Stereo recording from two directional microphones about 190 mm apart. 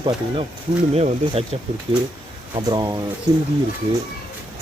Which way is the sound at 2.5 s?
20° right (ahead or behind).